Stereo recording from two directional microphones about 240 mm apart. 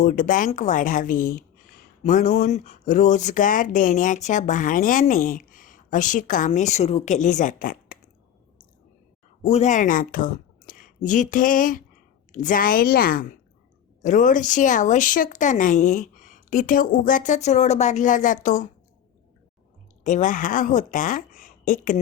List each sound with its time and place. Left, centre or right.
0.0 s speech: left
9.4 s a woman's voice: left
20.1 s speech: left